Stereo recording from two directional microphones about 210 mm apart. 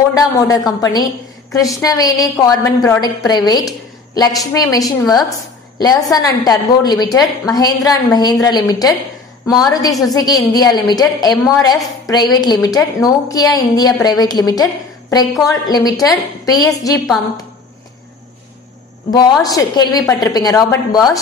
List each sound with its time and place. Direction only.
0.1 s a woman's voice: 15° left (ahead or behind)
19.4 s a woman's voice: 20° left (ahead or behind)